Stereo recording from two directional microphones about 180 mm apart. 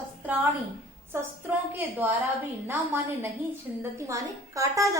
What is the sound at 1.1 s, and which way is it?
Speech, 15° right (ahead or behind).